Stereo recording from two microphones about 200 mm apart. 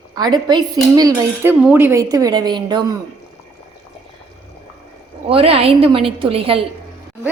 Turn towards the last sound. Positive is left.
turn(degrees=-25)  # may be behind; listen again after turning